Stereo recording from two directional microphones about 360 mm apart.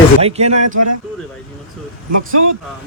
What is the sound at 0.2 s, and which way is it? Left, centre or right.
Speech, centre.